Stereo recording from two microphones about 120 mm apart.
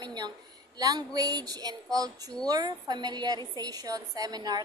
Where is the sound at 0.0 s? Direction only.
35° right (ahead or behind).